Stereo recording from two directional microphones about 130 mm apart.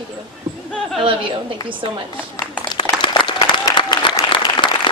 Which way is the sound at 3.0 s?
40° left (ahead or behind).